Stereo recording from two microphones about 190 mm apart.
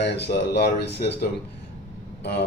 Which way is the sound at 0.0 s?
60° left (ahead or behind).